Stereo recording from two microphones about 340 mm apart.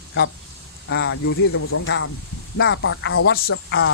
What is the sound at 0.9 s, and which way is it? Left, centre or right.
Speech, left.